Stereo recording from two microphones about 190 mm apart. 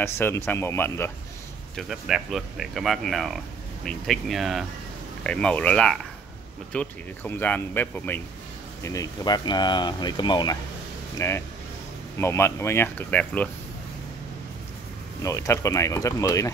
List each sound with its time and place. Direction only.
0.0 s speech: 10° left (ahead or behind)
1.8 s speech: centre (ahead or behind)
15.2 s speech: 15° left (ahead or behind)